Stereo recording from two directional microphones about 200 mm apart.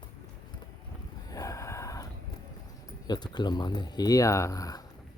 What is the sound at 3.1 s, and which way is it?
Speech, 20° left (ahead or behind).